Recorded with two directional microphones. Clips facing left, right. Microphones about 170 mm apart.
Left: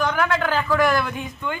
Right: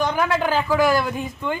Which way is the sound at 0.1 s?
15° right (ahead or behind).